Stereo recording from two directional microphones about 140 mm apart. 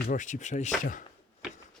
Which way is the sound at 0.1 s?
65° left (ahead or behind).